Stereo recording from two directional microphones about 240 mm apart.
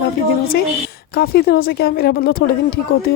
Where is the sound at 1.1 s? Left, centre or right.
Left.